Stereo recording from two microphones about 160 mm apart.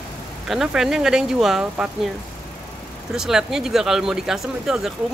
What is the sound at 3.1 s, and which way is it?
Speech, 5° right (ahead or behind).